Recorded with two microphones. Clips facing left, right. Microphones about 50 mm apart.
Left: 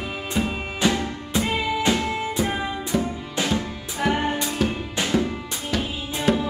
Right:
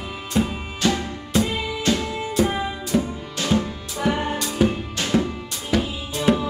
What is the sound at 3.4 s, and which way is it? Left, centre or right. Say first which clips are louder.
Music: even; centre.